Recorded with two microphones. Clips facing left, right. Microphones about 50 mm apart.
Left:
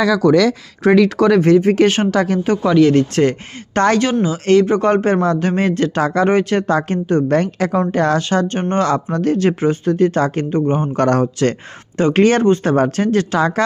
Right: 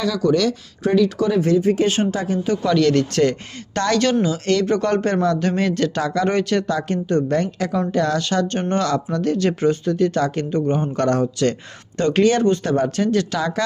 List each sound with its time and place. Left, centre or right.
0.8 s speech: left
1.4 s speech: left
2.6 s speech: centre; by 4.0 s left
4.0 s speech: centre
4.3 s speech: left
6.0 s speech: left
6.2 s speech: left
7.3 s speech: left
8.2 s speech: left
9.0 s speech: left; by 10.8 s centre
10.9 s speech: left